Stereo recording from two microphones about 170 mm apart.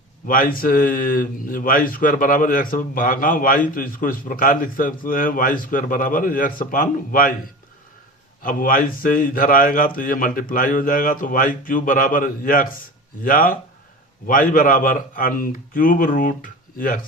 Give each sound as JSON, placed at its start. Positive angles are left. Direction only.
{"t": 0.3, "sound": "speech", "side_deg": 55}
{"t": 8.4, "sound": "speech", "side_deg": 55}